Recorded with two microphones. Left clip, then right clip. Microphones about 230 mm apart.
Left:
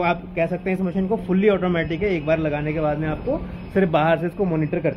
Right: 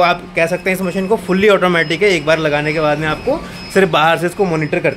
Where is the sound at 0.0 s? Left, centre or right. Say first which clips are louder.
Right 8 dB; right.